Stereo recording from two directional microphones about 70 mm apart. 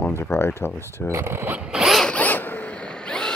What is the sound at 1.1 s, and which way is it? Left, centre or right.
Speech, right.